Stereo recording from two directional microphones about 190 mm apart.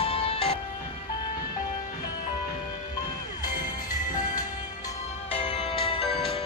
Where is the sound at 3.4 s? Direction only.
45° left (ahead or behind).